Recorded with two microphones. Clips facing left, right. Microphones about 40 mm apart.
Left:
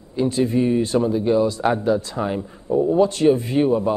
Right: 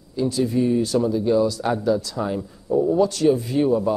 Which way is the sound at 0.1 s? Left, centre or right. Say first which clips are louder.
Left 2 dB; left.